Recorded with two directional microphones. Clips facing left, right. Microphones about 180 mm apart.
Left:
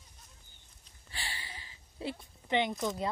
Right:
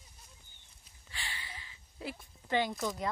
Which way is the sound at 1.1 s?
35° left (ahead or behind).